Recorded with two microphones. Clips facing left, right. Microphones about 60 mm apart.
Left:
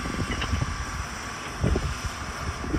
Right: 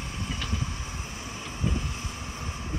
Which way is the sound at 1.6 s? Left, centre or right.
Left.